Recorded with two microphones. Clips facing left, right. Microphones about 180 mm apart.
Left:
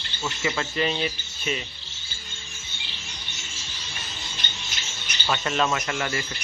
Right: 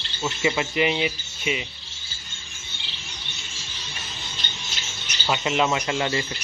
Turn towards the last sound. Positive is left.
turn(degrees=-20)  # may be behind; listen again after turning